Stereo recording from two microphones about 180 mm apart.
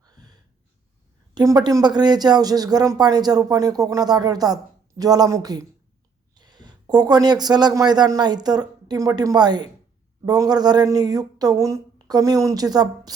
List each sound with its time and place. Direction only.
0.0 s gasp: 20° right (ahead or behind)
1.3 s a man's voice: 25° right (ahead or behind)